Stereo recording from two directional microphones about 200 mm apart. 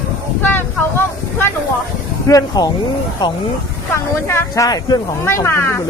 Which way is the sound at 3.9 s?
15° left (ahead or behind).